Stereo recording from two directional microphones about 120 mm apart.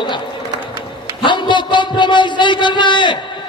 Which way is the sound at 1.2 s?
40° left (ahead or behind).